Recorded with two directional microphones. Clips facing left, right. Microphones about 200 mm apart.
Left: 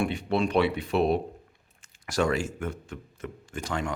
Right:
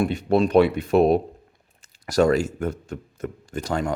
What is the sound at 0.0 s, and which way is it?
Speech, 40° right (ahead or behind).